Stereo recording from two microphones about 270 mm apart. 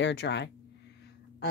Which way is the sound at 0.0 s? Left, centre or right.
Left.